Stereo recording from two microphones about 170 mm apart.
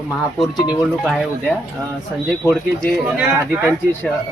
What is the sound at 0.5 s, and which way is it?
Speech, 25° left (ahead or behind).